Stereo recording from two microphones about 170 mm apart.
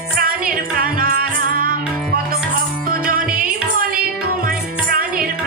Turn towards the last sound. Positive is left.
turn(degrees=-60)  # may be behind; listen again after turning